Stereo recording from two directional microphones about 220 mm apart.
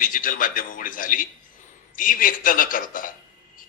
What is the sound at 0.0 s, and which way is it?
A man's voice, 40° left (ahead or behind).